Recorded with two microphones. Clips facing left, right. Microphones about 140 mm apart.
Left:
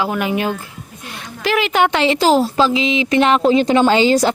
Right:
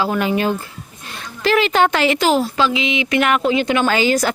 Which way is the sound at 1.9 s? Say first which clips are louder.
Left 2 dB; 25° left (ahead or behind).